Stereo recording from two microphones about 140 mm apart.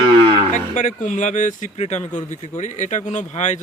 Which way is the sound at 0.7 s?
70° left (ahead or behind).